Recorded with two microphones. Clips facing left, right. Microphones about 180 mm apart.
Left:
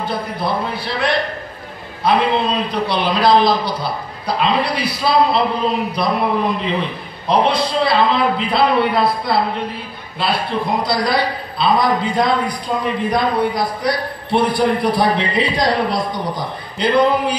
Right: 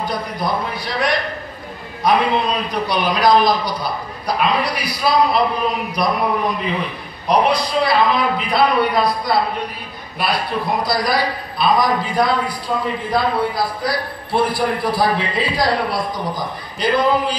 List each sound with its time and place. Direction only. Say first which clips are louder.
0.0 s a man's voice: left 1 dB; 25° left (ahead or behind)